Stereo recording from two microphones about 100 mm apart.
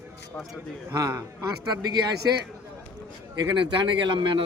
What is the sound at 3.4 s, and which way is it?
Speech, 55° right (ahead or behind).